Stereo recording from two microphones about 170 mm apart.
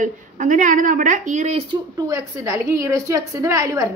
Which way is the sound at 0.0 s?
50° right (ahead or behind).